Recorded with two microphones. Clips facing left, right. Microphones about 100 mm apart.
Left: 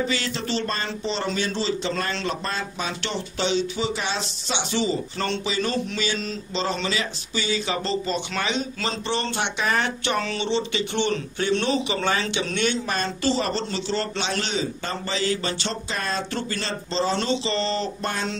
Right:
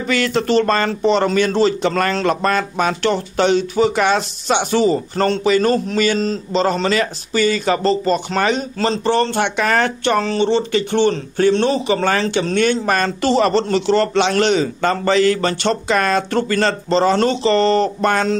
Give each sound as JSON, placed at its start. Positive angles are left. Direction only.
{"t": 0.0, "sound": "speech", "side_deg": -65}